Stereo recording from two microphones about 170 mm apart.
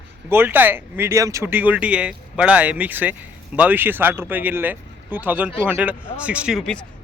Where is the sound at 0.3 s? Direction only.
10° right (ahead or behind).